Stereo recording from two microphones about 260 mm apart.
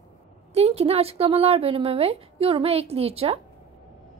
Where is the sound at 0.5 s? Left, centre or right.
Right.